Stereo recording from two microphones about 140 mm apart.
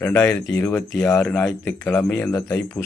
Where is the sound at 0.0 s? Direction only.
15° left (ahead or behind).